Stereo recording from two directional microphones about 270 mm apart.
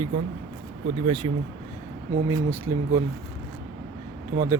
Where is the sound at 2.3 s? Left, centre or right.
Centre.